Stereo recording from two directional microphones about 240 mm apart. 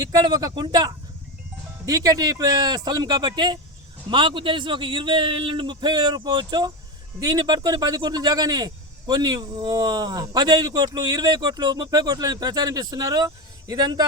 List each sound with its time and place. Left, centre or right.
0.0 s a man's voice: centre